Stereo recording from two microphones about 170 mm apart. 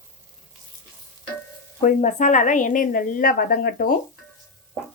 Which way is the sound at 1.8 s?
45° left (ahead or behind).